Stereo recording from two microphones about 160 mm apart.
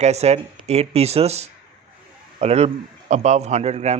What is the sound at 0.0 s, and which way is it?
Rub, 45° right (ahead or behind).